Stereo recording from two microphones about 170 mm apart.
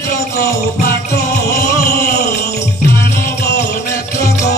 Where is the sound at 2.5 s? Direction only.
15° left (ahead or behind).